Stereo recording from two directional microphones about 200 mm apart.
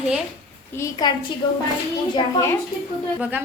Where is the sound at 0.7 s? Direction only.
15° left (ahead or behind).